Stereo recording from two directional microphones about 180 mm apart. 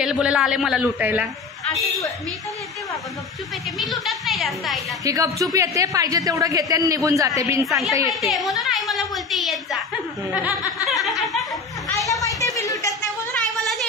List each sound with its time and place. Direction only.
0.0 s a man's voice: 5° right (ahead or behind)
3.7 s a man's voice: centre (ahead or behind)
5.0 s a woman's voice: 20° right (ahead or behind)
7.6 s a man's voice: centre (ahead or behind)
10.8 s a sound: centre (ahead or behind)
12.4 s a sound: 20° left (ahead or behind)